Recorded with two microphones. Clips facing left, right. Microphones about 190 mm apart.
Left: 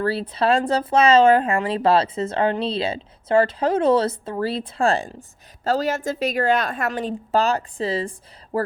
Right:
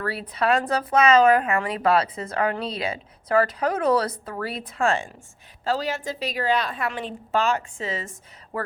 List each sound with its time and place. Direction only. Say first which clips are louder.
0.0 s a woman's voice: left 4 dB; 30° left (ahead or behind)